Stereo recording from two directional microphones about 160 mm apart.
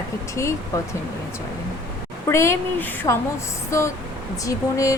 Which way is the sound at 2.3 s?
15° left (ahead or behind).